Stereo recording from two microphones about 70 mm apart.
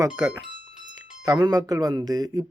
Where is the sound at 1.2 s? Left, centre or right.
Right.